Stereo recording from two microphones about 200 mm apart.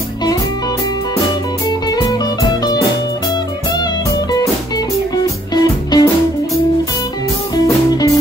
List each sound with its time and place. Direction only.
1.7 s music: 20° left (ahead or behind)
3.8 s music: 20° left (ahead or behind)
7.5 s music: 20° left (ahead or behind)